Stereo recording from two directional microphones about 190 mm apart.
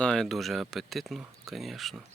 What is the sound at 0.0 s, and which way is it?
Speech, 5° left (ahead or behind).